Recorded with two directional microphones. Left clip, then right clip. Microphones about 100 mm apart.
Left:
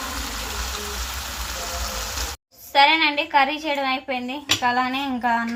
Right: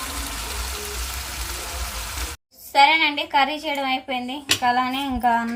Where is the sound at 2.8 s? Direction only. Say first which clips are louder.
Right 1 dB; 30° right (ahead or behind).